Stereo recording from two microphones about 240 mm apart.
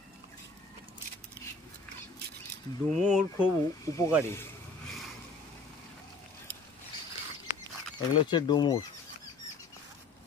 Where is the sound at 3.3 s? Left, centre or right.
Centre.